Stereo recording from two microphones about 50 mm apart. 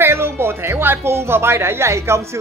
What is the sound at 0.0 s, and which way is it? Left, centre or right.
Speech, right.